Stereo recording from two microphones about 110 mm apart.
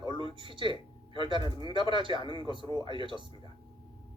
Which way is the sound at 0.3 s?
50° right (ahead or behind).